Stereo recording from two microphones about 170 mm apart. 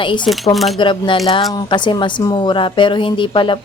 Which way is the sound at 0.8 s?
30° left (ahead or behind).